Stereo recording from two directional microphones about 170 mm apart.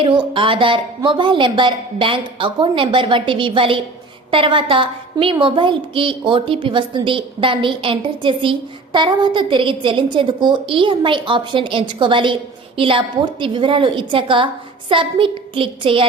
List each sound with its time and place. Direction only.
0.0 s a woman's voice: 30° right (ahead or behind)